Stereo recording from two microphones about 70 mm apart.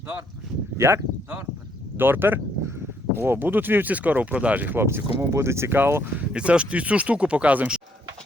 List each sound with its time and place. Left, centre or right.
0.8 s speech: right
2.0 s speech: right
6.3 s speech: centre